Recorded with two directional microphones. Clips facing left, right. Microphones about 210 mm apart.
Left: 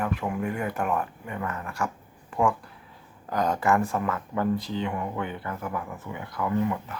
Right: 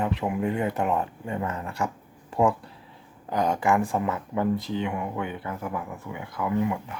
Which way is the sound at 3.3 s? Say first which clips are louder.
Right 1 dB; 15° right (ahead or behind).